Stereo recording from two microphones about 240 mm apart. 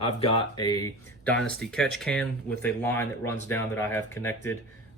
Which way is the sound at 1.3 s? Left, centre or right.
Centre.